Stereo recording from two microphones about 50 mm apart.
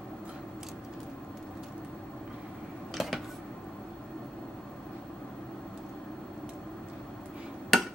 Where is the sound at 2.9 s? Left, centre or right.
Centre.